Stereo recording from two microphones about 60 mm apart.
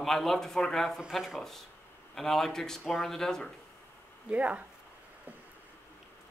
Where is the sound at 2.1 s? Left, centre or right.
Centre.